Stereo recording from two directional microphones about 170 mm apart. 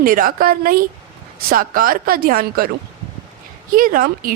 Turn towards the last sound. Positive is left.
turn(degrees=-55)  # may be behind; listen again after turning